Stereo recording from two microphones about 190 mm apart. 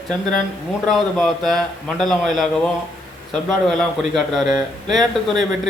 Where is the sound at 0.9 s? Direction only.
Centre (ahead or behind).